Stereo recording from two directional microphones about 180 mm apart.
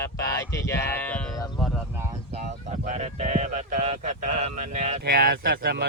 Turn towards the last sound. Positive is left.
turn(degrees=-60)  # may be behind; listen again after turning